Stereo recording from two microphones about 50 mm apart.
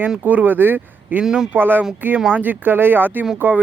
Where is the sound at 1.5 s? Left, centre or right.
Right.